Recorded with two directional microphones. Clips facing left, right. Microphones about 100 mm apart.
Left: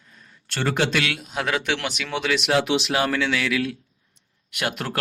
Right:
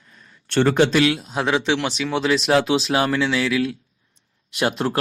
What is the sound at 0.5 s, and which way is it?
Speech, 25° right (ahead or behind).